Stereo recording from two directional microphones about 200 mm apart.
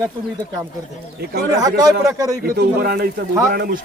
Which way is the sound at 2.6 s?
50° right (ahead or behind).